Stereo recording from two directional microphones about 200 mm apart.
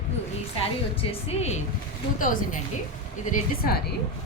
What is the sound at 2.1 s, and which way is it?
A woman's voice, 40° left (ahead or behind).